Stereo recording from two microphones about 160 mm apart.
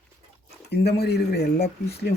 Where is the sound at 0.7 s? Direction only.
90° left.